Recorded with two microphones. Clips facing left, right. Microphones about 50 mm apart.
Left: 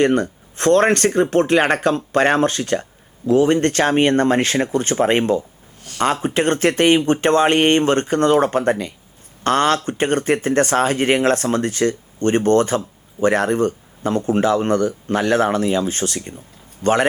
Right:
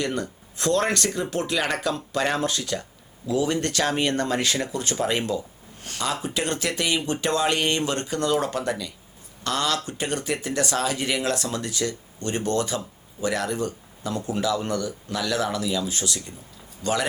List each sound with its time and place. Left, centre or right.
0.0 s speech: left